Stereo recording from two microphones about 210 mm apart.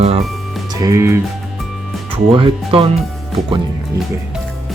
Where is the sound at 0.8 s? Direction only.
15° right (ahead or behind).